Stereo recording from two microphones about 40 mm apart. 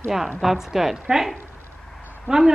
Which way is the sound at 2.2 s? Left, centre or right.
Centre.